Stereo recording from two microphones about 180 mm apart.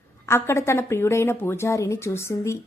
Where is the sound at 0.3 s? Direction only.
15° left (ahead or behind).